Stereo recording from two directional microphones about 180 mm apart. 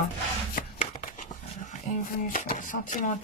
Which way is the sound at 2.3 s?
45° left (ahead or behind).